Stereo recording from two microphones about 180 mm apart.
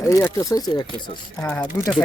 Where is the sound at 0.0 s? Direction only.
15° left (ahead or behind).